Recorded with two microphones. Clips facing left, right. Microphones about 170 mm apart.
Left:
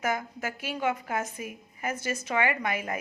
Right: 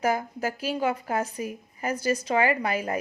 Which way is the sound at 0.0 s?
35° right (ahead or behind).